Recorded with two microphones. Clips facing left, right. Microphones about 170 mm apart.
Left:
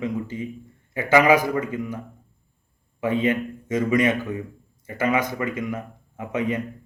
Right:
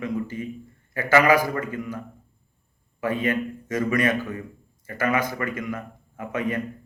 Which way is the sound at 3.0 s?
20° left (ahead or behind).